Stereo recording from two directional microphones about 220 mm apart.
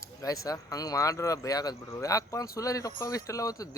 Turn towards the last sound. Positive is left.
turn(degrees=15)  # may be behind; listen again after turning